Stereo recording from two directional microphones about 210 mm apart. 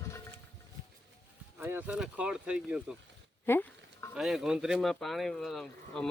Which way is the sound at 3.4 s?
10° left (ahead or behind).